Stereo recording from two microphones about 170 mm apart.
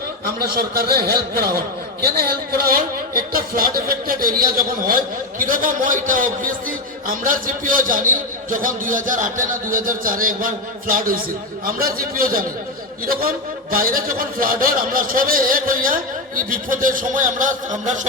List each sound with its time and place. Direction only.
0.3 s a man's voice: 65° right (ahead or behind); by 18.0 s 45° right (ahead or behind)